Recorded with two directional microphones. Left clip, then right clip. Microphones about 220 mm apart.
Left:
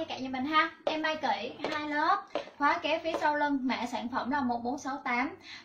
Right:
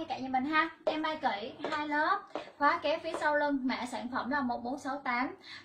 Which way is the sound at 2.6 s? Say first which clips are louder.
Left 1 dB; 10° right (ahead or behind).